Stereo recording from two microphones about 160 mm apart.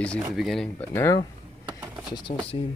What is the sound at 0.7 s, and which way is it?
Speech, 20° left (ahead or behind).